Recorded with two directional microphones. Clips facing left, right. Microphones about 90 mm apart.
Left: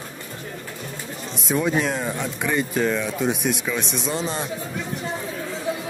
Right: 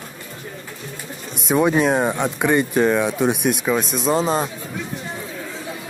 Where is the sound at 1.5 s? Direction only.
55° right (ahead or behind).